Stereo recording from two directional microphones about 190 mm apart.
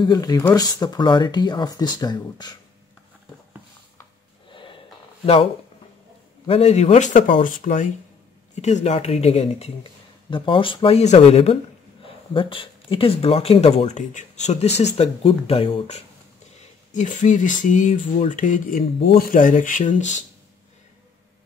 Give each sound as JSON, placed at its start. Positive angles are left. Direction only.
{"t": 0.0, "sound": "speech", "side_deg": 20}
{"t": 4.5, "sound": "a sound", "side_deg": 25}
{"t": 5.2, "sound": "speech", "side_deg": 30}
{"t": 16.9, "sound": "speech", "side_deg": 40}